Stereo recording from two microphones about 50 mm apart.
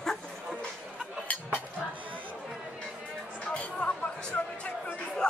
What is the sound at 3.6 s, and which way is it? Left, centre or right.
Music, left.